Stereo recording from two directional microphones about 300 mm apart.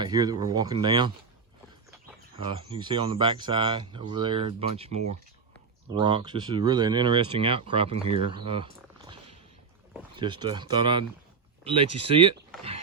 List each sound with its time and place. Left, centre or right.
0.0 s speech: centre
2.6 s speech: centre
10.2 s speech: centre